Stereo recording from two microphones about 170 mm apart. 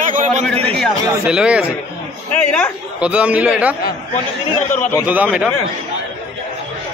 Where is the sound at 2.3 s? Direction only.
10° left (ahead or behind).